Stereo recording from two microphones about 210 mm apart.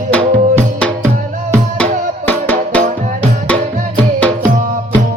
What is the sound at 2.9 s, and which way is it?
Music, 35° right (ahead or behind).